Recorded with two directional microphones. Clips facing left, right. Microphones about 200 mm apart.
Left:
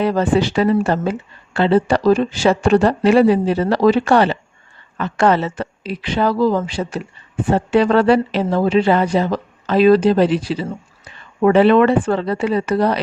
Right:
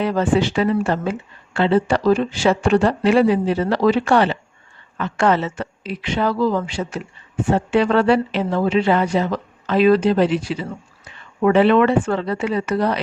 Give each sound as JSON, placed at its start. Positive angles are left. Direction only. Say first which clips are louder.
{"t": 0.0, "sound": "speech", "louder": "left 2 dB", "side_deg": 35}